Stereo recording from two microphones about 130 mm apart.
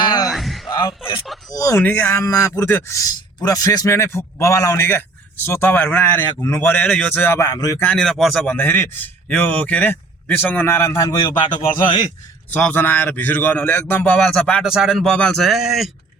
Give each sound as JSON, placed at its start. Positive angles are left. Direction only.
{"t": 0.0, "sound": "a sound", "side_deg": 30}
{"t": 0.3, "sound": "a sound", "side_deg": 0}
{"t": 1.5, "sound": "speech", "side_deg": 25}
{"t": 1.8, "sound": "speech", "side_deg": 15}
{"t": 7.9, "sound": "a man's voice", "side_deg": 0}
{"t": 8.4, "sound": "a man's voice", "side_deg": 15}
{"t": 11.3, "sound": "a man's voice", "side_deg": 35}
{"t": 12.5, "sound": "a man's voice", "side_deg": 15}
{"t": 14.6, "sound": "a man's voice", "side_deg": -5}